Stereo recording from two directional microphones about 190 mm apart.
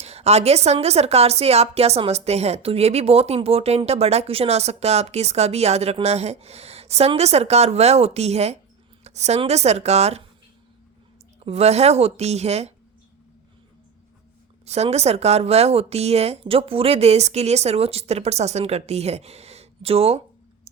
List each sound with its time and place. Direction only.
0.0 s a woman's voice: 35° right (ahead or behind)
11.3 s a woman's voice: 35° right (ahead or behind)
14.6 s a woman's voice: 35° right (ahead or behind)